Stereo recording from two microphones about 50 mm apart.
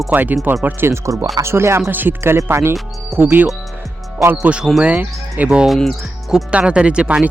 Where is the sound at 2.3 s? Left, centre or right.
Right.